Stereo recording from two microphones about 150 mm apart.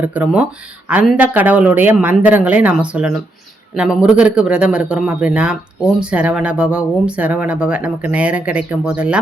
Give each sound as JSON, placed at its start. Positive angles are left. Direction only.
{"t": 0.0, "sound": "speech", "side_deg": -10}
{"t": 4.2, "sound": "speech", "side_deg": -5}